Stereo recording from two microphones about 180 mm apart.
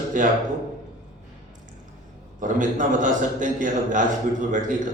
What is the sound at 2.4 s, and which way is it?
A man's voice, 45° right (ahead or behind).